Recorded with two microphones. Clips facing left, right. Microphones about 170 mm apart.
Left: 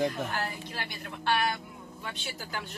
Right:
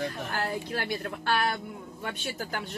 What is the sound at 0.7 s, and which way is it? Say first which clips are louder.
Speech: right 7 dB; 55° right (ahead or behind).